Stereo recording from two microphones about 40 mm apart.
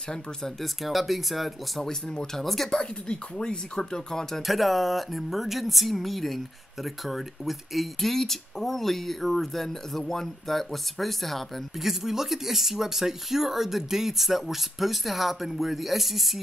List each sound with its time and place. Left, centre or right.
0.6 s speech: centre
1.9 s speech: centre
2.4 s speech: centre
2.8 s speech: left
4.4 s speech: centre
11.8 s speech: centre